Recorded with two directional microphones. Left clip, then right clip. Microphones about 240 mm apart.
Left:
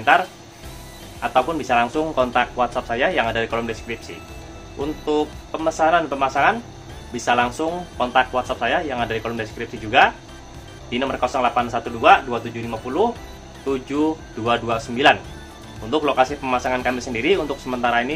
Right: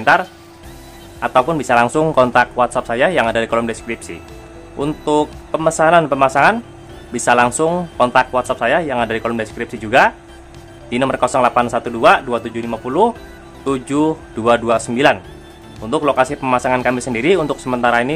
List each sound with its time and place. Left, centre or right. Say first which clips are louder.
0.0 s speech: right 3 dB; right
5.0 s speech: right 5 dB; right